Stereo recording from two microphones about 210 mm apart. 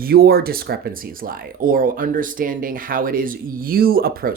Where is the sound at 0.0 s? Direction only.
45° right (ahead or behind).